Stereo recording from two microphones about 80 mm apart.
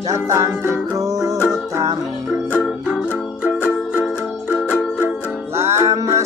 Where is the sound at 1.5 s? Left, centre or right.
Right.